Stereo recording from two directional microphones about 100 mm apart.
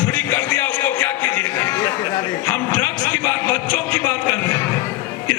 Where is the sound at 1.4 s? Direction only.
20° left (ahead or behind).